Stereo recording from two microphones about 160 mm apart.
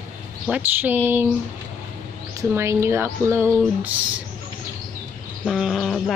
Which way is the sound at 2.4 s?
15° right (ahead or behind).